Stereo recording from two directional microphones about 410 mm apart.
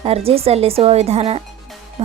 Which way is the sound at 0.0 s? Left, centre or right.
Centre.